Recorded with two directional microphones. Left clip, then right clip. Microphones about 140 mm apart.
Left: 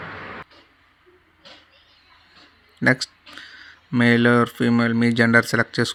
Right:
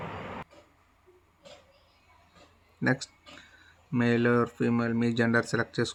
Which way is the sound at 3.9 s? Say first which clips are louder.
Left 9 dB; 25° left (ahead or behind).